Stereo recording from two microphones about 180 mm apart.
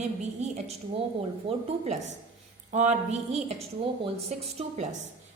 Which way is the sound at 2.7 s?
40° right (ahead or behind).